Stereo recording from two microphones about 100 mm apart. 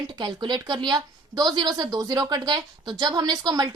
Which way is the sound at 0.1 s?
45° right (ahead or behind).